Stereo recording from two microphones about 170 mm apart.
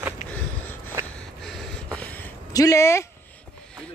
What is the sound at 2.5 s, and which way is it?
Speech, 20° left (ahead or behind).